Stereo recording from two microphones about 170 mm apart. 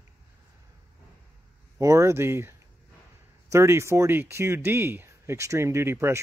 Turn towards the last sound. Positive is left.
turn(degrees=-15)  # may be behind; listen again after turning